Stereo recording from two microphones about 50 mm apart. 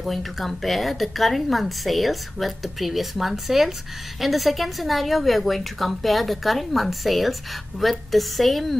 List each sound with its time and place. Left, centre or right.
0.0 s a woman's voice: centre